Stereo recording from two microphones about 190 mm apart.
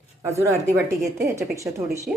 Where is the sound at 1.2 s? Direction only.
15° right (ahead or behind).